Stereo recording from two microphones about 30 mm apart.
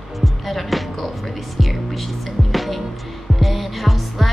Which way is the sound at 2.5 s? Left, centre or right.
Centre.